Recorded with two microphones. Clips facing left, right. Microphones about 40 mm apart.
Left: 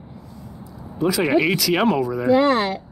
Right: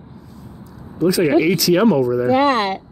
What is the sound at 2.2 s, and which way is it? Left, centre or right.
Speech, right.